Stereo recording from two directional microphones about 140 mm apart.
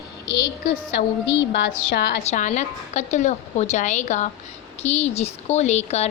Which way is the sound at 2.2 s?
55° left (ahead or behind).